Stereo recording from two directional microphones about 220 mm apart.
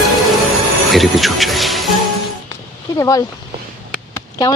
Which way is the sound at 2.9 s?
15° left (ahead or behind).